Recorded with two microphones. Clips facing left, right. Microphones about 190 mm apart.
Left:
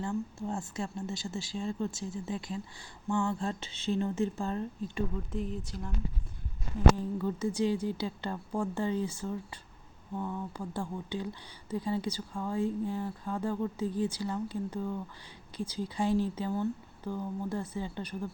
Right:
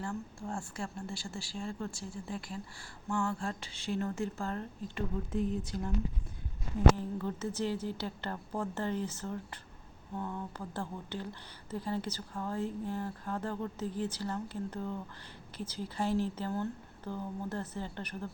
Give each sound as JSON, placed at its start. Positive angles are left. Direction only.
{"t": 0.0, "sound": "speech", "side_deg": 20}
{"t": 5.3, "sound": "speech", "side_deg": 0}
{"t": 6.9, "sound": "speech", "side_deg": 10}